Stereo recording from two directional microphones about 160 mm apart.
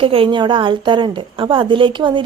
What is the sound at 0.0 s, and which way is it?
A woman's voice, 35° right (ahead or behind).